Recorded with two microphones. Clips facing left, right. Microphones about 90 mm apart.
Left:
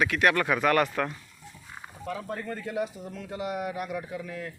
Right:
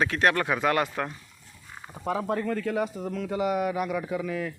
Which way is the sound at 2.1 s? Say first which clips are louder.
Right 7 dB; 90° right.